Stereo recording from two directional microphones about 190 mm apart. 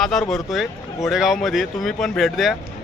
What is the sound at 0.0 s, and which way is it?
Speech, centre (ahead or behind).